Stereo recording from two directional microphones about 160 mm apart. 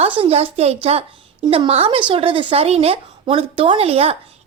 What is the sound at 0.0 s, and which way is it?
A woman's voice, 35° right (ahead or behind).